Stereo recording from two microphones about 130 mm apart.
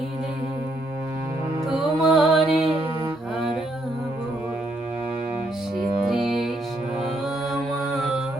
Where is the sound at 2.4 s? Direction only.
45° right (ahead or behind).